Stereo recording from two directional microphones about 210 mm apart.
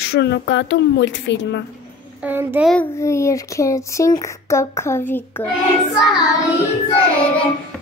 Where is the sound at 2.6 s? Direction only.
10° left (ahead or behind).